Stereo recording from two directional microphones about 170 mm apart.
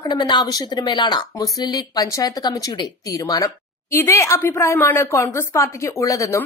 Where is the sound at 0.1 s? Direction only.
25° left (ahead or behind).